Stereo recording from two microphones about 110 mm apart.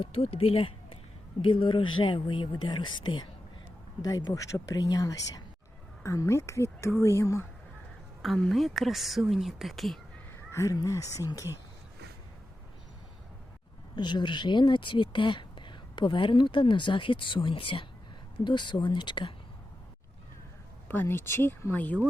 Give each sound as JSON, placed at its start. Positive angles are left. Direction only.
{"t": 0.0, "sound": "speech", "side_deg": 60}
{"t": 8.2, "sound": "speech", "side_deg": 0}
{"t": 10.3, "sound": "speech", "side_deg": 25}
{"t": 13.9, "sound": "speech", "side_deg": 45}
{"t": 20.8, "sound": "speech", "side_deg": 20}